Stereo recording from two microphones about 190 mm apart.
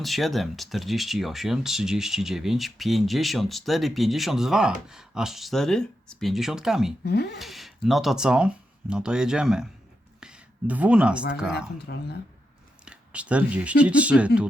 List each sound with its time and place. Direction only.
0.0 s speech: centre (ahead or behind)
7.0 s speech: 60° left (ahead or behind)
7.3 s speech: centre (ahead or behind)
10.2 s a sound: 5° right (ahead or behind)
11.9 s speech: 60° left (ahead or behind)
12.8 s speech: 5° right (ahead or behind)